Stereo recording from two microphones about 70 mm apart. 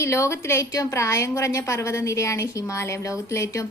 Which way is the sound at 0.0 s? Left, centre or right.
Left.